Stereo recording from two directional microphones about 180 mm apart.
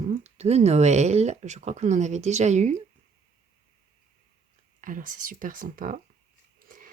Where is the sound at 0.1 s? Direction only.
40° right (ahead or behind).